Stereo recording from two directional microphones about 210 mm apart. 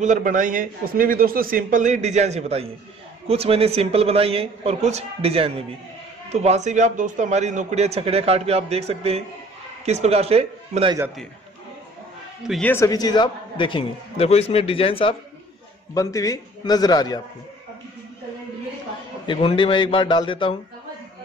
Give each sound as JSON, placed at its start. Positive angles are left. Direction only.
{"t": 0.0, "sound": "a man's voice", "side_deg": -35}
{"t": 12.4, "sound": "a man's voice", "side_deg": 5}
{"t": 15.9, "sound": "a man's voice", "side_deg": 15}
{"t": 19.2, "sound": "a man's voice", "side_deg": 25}